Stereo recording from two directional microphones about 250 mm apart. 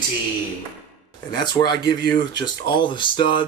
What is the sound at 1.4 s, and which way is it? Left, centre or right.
A man's voice, centre.